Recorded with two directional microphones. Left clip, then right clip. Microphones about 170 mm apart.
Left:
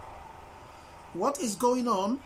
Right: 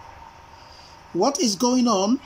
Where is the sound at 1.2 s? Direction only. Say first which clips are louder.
Right 7 dB; 15° right (ahead or behind).